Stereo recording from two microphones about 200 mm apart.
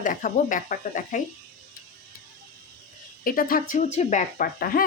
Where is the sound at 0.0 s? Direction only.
40° left (ahead or behind).